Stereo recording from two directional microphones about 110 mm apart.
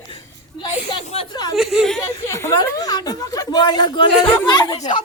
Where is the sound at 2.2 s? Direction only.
25° left (ahead or behind).